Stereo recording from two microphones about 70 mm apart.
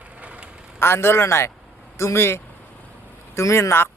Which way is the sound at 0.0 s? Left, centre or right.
Centre.